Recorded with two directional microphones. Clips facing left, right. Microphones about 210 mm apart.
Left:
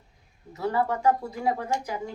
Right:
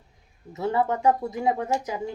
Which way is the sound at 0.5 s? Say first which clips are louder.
Right 2 dB; 25° right (ahead or behind).